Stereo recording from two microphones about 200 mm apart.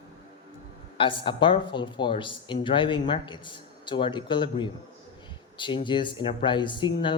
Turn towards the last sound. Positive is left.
turn(degrees=25)  # may be behind; listen again after turning